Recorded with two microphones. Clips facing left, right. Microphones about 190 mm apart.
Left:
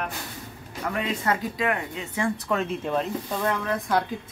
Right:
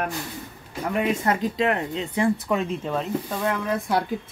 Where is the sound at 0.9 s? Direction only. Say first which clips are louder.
Right 4 dB; 20° right (ahead or behind).